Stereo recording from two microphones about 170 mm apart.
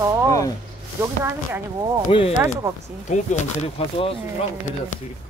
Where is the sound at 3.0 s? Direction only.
45° left (ahead or behind).